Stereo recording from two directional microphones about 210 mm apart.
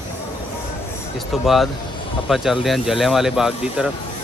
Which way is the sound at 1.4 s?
Centre (ahead or behind).